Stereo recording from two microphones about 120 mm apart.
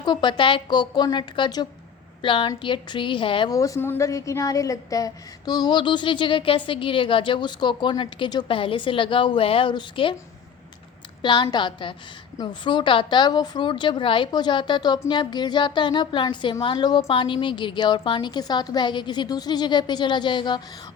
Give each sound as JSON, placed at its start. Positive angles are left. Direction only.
{"t": 0.0, "sound": "a woman's voice", "side_deg": 40}
{"t": 3.5, "sound": "a woman's voice", "side_deg": 25}
{"t": 11.2, "sound": "a woman's voice", "side_deg": 40}